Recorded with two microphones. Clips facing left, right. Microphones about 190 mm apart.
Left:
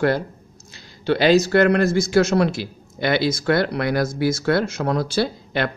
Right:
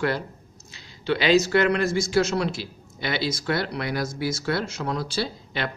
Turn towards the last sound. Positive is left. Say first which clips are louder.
# left 6 dB
turn(degrees=55)  # may be behind; listen again after turning